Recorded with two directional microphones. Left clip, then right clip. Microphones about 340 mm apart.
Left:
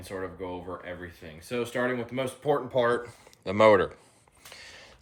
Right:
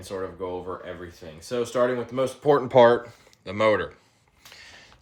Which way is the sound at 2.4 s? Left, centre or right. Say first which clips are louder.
Right 9 dB; right.